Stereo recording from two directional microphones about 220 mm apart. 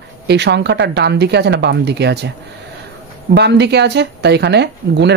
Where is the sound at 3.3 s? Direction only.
50° right (ahead or behind).